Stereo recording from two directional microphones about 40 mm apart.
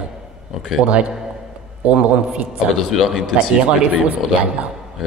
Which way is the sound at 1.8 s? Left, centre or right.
Right.